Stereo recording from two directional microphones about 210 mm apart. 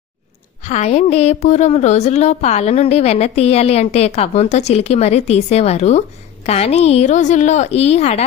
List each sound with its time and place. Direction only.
0.6 s a woman's voice: 35° left (ahead or behind)